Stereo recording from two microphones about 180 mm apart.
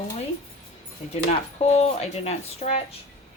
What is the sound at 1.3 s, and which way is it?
Speech, 35° left (ahead or behind).